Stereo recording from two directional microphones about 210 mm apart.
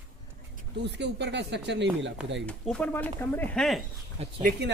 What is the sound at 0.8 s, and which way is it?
Speech, 55° right (ahead or behind).